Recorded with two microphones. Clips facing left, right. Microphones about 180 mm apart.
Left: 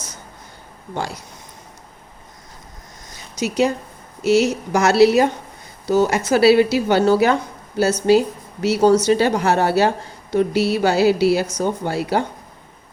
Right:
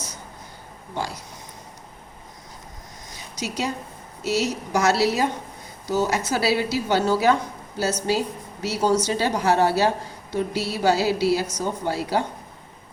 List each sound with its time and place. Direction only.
4.3 s a woman's voice: 70° left (ahead or behind)